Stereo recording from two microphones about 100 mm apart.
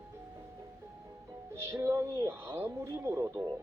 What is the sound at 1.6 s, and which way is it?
Speech, 25° right (ahead or behind).